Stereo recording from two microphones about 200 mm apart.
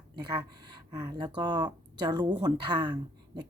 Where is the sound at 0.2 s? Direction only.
20° right (ahead or behind).